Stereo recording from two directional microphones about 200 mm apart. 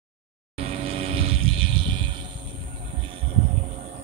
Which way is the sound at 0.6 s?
30° right (ahead or behind).